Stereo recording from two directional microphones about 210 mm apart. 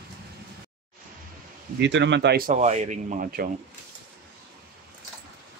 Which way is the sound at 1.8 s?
55° right (ahead or behind).